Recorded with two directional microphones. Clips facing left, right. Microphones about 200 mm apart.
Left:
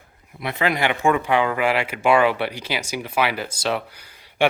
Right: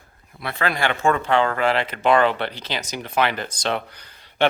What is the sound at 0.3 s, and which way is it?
Speech, 20° left (ahead or behind).